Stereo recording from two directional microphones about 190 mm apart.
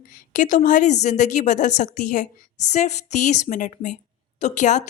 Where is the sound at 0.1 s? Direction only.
40° left (ahead or behind).